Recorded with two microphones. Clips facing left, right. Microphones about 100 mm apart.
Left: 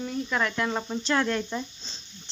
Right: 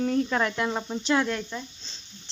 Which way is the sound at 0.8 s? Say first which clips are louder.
Right 2 dB; centre (ahead or behind).